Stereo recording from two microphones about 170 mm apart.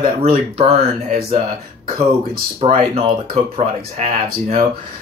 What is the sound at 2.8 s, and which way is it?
Speech, 35° right (ahead or behind).